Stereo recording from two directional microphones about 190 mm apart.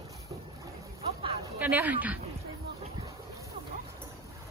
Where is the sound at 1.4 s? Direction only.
10° right (ahead or behind).